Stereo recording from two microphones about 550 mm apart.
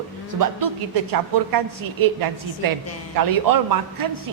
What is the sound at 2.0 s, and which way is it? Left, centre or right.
A woman's voice, right.